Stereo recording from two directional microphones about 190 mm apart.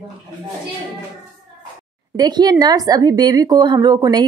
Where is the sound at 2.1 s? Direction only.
20° right (ahead or behind).